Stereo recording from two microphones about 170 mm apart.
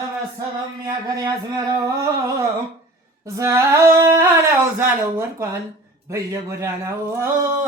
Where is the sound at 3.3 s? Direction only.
15° right (ahead or behind).